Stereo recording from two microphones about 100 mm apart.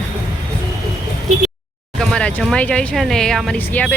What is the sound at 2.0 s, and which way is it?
Speech, 10° left (ahead or behind).